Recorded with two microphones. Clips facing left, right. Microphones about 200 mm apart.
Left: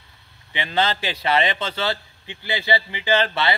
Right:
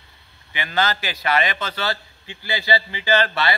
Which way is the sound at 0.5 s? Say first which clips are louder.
Left 1 dB; 25° left (ahead or behind).